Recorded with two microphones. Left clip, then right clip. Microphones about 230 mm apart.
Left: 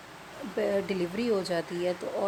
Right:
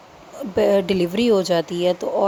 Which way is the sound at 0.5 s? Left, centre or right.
Right.